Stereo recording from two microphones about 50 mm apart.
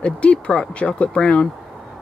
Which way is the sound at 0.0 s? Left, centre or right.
Left.